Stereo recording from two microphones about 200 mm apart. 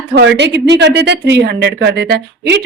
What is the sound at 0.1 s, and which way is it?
A woman's voice, 60° right (ahead or behind).